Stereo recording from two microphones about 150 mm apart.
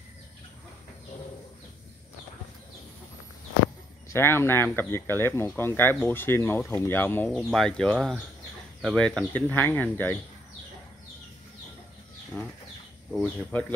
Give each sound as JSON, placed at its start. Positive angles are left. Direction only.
{"t": 4.1, "sound": "speech", "side_deg": 15}
{"t": 12.3, "sound": "speech", "side_deg": 5}